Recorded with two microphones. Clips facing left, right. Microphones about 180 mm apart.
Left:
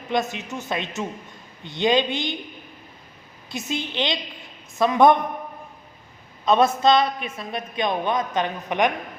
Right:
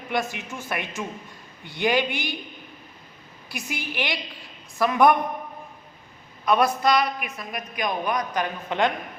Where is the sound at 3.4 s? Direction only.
20° left (ahead or behind).